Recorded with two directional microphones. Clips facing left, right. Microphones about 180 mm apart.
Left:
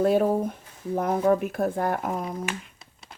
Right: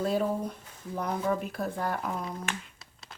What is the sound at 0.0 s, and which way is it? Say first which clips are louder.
Speech: left 7 dB; 55° left (ahead or behind).